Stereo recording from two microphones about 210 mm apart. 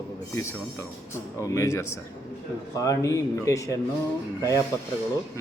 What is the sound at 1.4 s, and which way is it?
Speech, 15° left (ahead or behind).